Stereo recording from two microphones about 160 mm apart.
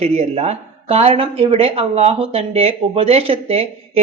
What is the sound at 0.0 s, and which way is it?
Speech, 40° right (ahead or behind).